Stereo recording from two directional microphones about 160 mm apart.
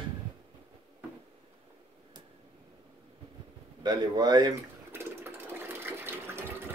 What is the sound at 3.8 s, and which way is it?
Speech, 25° right (ahead or behind).